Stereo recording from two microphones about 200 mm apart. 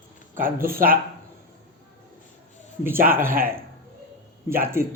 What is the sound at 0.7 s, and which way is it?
Speech, 45° right (ahead or behind).